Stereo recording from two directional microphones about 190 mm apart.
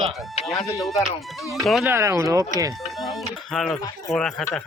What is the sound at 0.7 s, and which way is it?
Speech, centre (ahead or behind).